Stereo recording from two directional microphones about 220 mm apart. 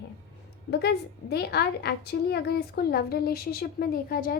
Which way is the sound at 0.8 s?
45° left (ahead or behind).